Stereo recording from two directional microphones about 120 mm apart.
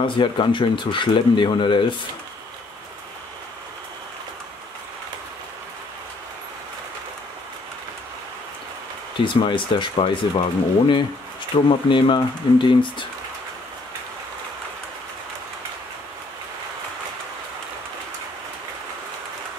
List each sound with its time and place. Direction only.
0.0 s speech: 45° left (ahead or behind)
9.2 s speech: 45° left (ahead or behind)